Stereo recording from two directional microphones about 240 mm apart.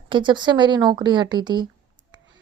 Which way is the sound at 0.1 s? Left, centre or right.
Centre.